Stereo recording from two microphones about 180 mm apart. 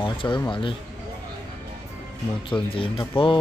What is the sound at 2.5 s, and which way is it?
Speech, 30° left (ahead or behind).